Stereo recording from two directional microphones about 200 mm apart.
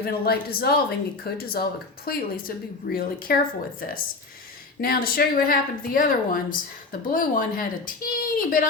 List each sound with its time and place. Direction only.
0.0 s speech: 50° left (ahead or behind)